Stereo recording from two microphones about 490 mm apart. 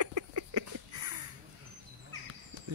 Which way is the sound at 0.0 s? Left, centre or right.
Right.